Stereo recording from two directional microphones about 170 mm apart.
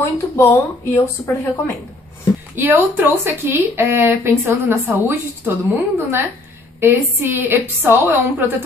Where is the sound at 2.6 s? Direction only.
10° right (ahead or behind).